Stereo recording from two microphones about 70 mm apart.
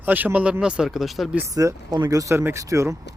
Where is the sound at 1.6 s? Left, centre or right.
Right.